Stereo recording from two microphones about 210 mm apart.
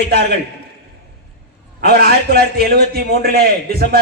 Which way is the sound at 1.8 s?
45° right (ahead or behind).